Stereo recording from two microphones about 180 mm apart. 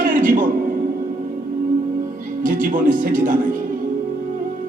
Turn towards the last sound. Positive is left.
turn(degrees=-50)  # may be behind; listen again after turning